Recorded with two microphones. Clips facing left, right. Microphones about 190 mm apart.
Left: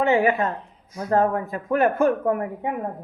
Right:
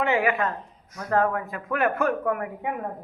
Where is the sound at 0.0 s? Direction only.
30° left (ahead or behind).